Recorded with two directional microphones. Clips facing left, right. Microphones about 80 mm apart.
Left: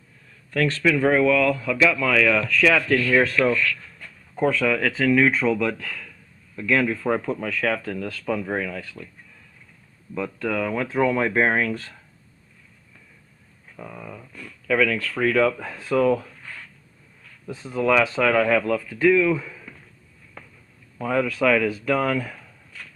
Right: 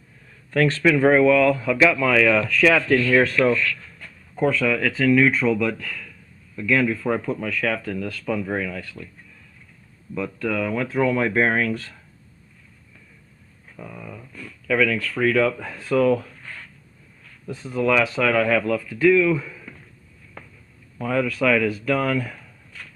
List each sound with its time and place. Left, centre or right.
0.5 s speech: right; by 3.0 s centre
3.1 s speech: centre
3.5 s speech: right
4.4 s speech: left
10.2 s speech: left
13.7 s speech: centre
14.7 s speech: left
17.5 s speech: left
20.4 s a sound: centre
21.0 s speech: left
22.4 s a sound: centre